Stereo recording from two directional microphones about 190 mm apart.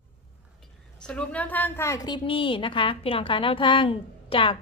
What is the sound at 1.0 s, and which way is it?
A woman's voice, 5° left (ahead or behind).